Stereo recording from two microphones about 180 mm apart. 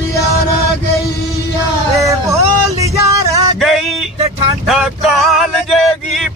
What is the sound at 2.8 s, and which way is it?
Music, 15° right (ahead or behind).